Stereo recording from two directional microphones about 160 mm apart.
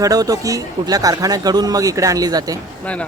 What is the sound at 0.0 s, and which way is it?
Speech, 20° right (ahead or behind).